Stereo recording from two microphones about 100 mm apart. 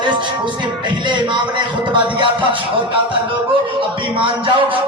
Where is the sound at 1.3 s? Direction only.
55° right (ahead or behind).